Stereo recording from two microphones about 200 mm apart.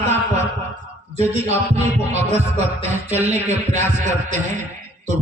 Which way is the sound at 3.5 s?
35° right (ahead or behind).